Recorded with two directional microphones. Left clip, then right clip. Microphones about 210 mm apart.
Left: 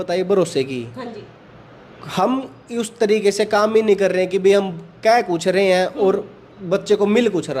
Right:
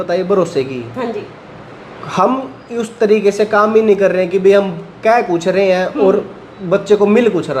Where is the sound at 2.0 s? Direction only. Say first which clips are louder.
Right 6 dB; 30° left (ahead or behind).